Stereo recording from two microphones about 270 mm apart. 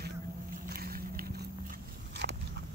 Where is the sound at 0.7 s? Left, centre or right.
Right.